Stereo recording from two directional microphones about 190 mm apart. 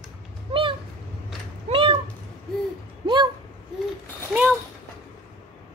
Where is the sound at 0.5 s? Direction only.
25° right (ahead or behind).